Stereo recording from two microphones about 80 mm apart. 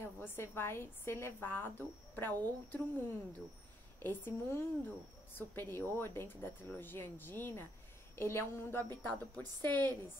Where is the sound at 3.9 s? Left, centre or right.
Left.